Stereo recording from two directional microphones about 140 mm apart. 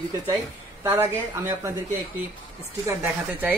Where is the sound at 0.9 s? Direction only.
20° right (ahead or behind).